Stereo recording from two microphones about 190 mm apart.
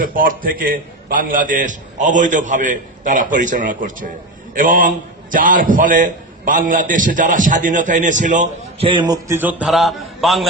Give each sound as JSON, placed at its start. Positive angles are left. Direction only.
{"t": 0.0, "sound": "a man's voice", "side_deg": -45}
{"t": 8.9, "sound": "a man's voice", "side_deg": -20}